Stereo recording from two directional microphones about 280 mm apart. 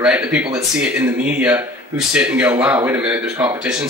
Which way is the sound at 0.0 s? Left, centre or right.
Centre.